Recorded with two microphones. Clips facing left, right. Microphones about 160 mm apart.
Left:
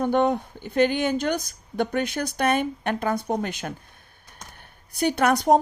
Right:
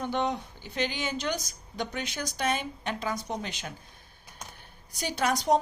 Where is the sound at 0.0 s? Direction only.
50° left (ahead or behind).